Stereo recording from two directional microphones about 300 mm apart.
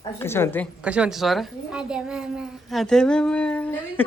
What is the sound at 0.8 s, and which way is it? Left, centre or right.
A child's voice, centre.